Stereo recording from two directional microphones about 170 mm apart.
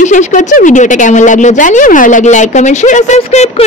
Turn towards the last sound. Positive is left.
turn(degrees=40)  # may be behind; listen again after turning